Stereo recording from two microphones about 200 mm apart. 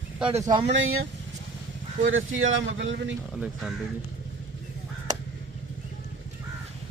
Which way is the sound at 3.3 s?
5° right (ahead or behind).